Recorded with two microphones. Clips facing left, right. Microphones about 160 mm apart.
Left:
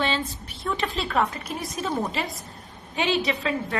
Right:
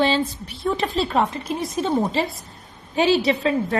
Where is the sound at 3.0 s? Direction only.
35° right (ahead or behind).